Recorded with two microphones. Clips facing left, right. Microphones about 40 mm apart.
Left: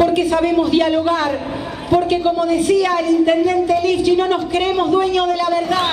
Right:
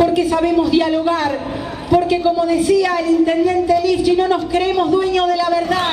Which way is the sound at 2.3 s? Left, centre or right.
Left.